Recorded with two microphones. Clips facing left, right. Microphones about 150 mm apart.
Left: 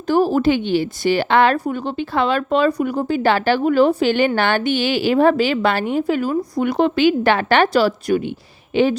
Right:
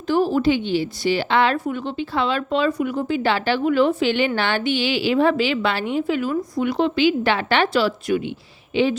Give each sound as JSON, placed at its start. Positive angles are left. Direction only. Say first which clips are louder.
{"t": 0.1, "sound": "a woman's voice", "louder": "left 3 dB", "side_deg": 45}